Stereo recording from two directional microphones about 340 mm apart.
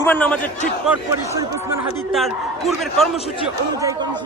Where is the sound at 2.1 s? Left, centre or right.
Centre.